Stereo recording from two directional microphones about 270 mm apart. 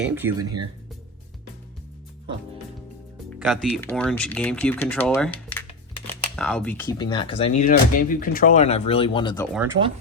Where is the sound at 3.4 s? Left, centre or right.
Centre.